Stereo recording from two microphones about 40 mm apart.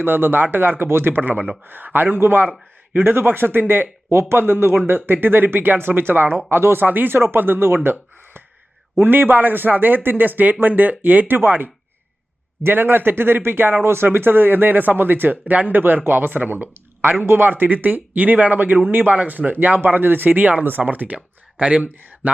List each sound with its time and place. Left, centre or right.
0.0 s speech: right
4.9 s speech: right
6.5 s speech: right
6.8 s a man's voice: right
7.1 s speech: right
9.0 s a man's voice: right
13.8 s a man's voice: right
19.1 s a man's voice: right